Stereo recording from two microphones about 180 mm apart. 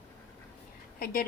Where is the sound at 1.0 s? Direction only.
50° left (ahead or behind).